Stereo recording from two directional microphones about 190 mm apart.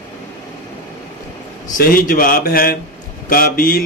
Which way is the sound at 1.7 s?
50° left (ahead or behind).